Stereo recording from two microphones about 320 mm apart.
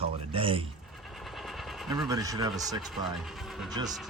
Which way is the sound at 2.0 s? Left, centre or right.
Centre.